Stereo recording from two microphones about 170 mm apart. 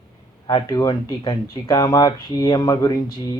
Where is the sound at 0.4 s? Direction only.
25° left (ahead or behind).